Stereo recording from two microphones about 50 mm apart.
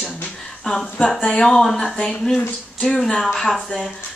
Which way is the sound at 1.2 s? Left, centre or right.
Centre.